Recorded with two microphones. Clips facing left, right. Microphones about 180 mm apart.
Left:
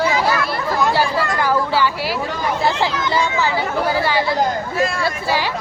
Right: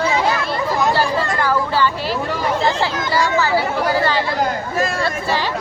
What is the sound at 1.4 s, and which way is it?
Speech, 10° left (ahead or behind).